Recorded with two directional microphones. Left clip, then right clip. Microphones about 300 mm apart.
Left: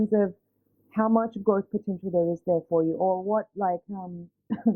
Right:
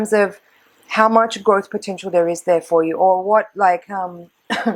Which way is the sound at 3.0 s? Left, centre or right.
Right.